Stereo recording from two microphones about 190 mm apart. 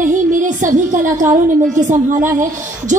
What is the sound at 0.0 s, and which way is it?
Music, 45° right (ahead or behind).